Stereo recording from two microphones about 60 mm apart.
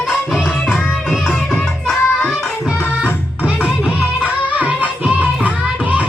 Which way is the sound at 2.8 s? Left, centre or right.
Left.